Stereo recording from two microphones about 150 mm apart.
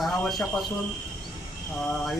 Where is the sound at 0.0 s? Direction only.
Centre (ahead or behind).